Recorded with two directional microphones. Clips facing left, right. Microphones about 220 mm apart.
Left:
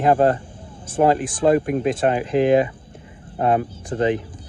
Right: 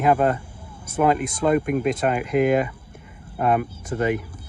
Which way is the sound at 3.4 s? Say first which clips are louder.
Left 2 dB; 30° left (ahead or behind).